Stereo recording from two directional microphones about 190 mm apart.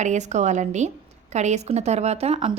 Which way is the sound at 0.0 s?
40° right (ahead or behind).